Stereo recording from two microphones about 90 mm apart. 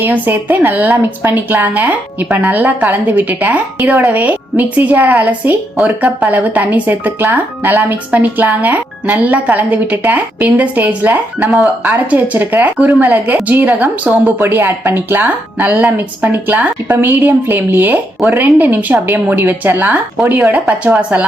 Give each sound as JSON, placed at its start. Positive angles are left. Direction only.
{"t": 0.0, "sound": "a woman's voice", "side_deg": -20}